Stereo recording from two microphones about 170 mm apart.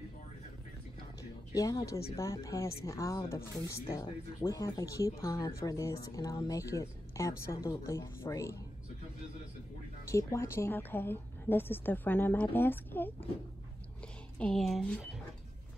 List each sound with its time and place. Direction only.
1.5 s a woman's voice: 20° left (ahead or behind)
10.0 s a woman's voice: 15° left (ahead or behind)